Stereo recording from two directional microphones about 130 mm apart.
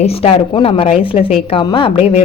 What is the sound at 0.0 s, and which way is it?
A woman's voice, 50° left (ahead or behind).